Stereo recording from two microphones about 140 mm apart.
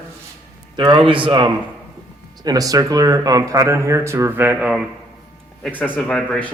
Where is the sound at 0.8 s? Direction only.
35° right (ahead or behind); by 4.7 s 15° right (ahead or behind).